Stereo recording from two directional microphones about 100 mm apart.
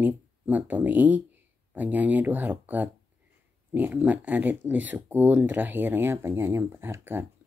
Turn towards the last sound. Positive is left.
turn(degrees=-25)  # may be behind; listen again after turning